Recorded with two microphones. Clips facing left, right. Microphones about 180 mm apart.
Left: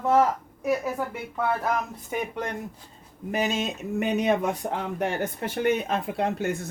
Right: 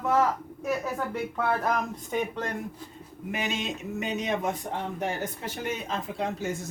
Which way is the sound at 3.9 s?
60° left (ahead or behind).